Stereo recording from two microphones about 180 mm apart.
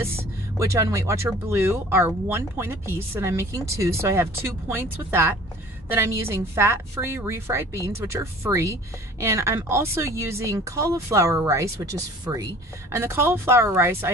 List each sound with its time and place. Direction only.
0.6 s speech: 15° right (ahead or behind)